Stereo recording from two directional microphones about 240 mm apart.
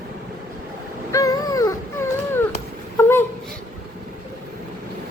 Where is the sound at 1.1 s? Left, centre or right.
Centre.